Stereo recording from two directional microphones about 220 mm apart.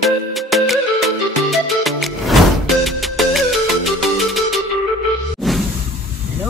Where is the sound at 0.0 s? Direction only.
Centre (ahead or behind).